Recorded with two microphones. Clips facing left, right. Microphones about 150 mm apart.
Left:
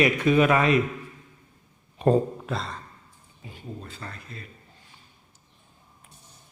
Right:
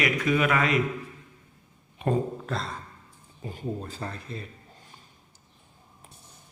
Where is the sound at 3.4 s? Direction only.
40° right (ahead or behind).